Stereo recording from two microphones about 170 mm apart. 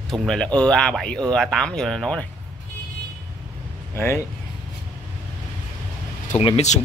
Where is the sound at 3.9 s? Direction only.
15° left (ahead or behind).